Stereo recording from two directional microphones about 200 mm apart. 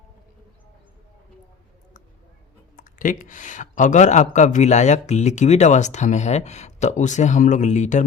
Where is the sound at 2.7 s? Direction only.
40° left (ahead or behind).